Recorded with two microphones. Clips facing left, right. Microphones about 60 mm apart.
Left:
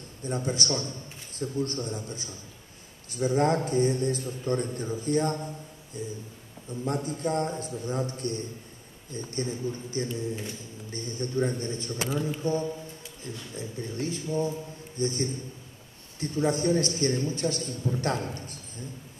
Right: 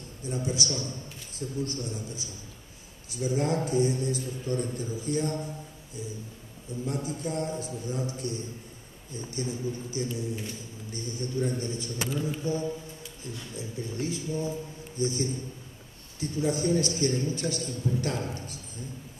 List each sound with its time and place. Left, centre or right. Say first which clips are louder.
0.2 s a man's voice: left 1 dB; left
6.8 s a man's voice: left 3 dB; left